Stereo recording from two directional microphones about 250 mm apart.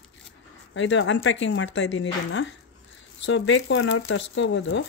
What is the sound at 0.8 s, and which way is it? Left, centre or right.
Speech, left.